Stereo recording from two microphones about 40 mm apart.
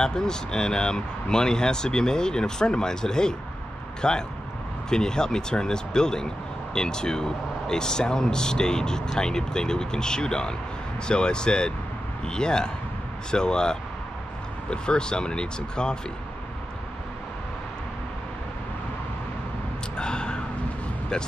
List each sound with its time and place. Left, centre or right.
0.0 s speech: centre
20.0 s gasp: left
21.1 s speech: left